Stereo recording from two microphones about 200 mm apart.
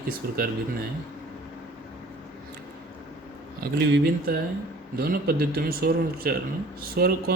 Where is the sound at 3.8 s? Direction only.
55° right (ahead or behind).